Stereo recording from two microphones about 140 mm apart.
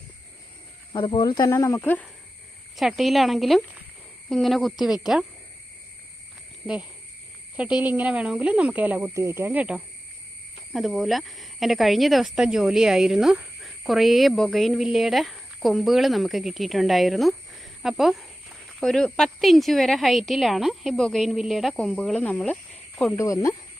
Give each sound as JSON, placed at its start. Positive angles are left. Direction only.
{"t": 0.9, "sound": "speech", "side_deg": 35}
{"t": 1.5, "sound": "speech", "side_deg": 20}
{"t": 2.7, "sound": "speech", "side_deg": 0}
{"t": 7.5, "sound": "speech", "side_deg": -10}
{"t": 23.1, "sound": "speech", "side_deg": 25}